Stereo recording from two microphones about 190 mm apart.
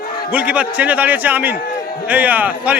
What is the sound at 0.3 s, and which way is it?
A man's voice, 10° right (ahead or behind).